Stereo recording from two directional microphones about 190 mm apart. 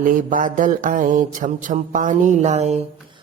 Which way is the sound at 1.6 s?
45° right (ahead or behind).